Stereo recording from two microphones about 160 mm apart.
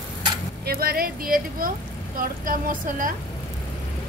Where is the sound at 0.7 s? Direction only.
70° right (ahead or behind).